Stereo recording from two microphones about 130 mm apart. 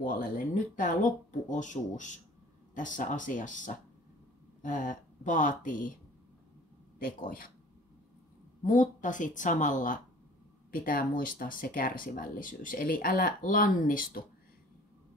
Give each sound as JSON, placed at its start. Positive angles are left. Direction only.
{"t": 0.0, "sound": "speech", "side_deg": 90}
{"t": 7.0, "sound": "speech", "side_deg": 90}
{"t": 8.6, "sound": "speech", "side_deg": 80}